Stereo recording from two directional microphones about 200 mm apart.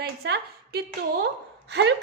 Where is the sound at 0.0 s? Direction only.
55° right (ahead or behind).